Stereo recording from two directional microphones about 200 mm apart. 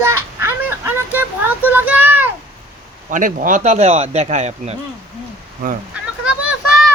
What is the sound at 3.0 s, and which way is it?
Speech, 40° right (ahead or behind).